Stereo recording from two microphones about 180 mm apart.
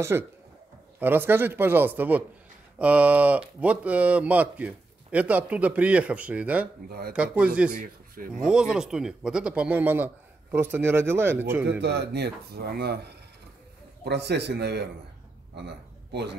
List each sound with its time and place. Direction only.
0.1 s speech: 10° right (ahead or behind)
7.7 s a man's voice: 50° right (ahead or behind)
8.4 s speech: 5° right (ahead or behind)
11.8 s a man's voice: 70° right (ahead or behind)
15.5 s a sound: 70° right (ahead or behind)